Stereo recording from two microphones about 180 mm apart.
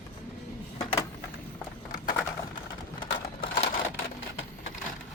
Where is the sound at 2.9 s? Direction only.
30° left (ahead or behind).